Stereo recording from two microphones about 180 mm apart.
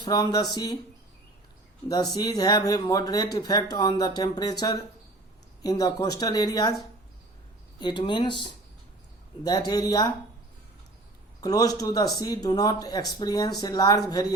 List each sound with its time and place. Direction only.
0.0 s speech: 20° left (ahead or behind)
1.9 s speech: 20° left (ahead or behind)
7.8 s speech: 25° left (ahead or behind)
11.3 s speech: 20° left (ahead or behind)